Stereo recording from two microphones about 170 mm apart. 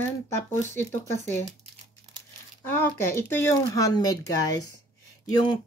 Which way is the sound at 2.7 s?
15° left (ahead or behind).